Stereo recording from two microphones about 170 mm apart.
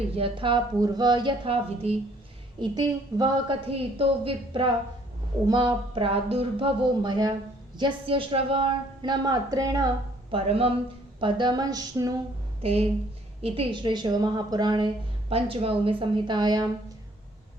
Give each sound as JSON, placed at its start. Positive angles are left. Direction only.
{"t": 0.1, "sound": "a woman's voice", "side_deg": -30}
{"t": 10.3, "sound": "a woman's voice", "side_deg": -35}
{"t": 12.6, "sound": "a woman's voice", "side_deg": -35}